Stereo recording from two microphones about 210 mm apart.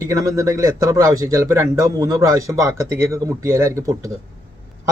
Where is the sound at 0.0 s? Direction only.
15° right (ahead or behind).